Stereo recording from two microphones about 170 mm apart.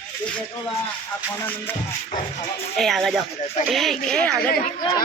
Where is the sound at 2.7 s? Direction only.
Centre (ahead or behind).